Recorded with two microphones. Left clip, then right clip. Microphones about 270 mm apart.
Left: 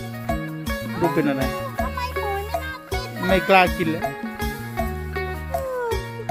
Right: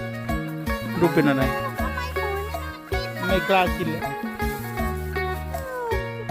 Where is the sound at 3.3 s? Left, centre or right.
Centre.